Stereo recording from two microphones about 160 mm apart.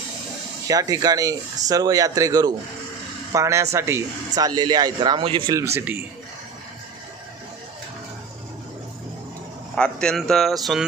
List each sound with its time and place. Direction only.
0.7 s a man's voice: 20° right (ahead or behind)
5.8 s a man's voice: 15° right (ahead or behind)
9.8 s speech: 5° left (ahead or behind)